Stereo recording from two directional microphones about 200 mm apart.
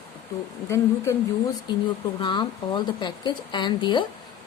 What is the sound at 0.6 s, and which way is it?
Speech, 15° left (ahead or behind).